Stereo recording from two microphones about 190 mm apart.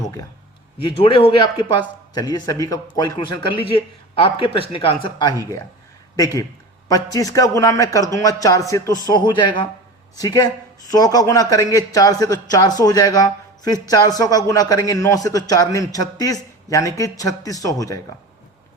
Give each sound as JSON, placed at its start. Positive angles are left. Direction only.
{"t": 0.8, "sound": "a man's voice", "side_deg": 30}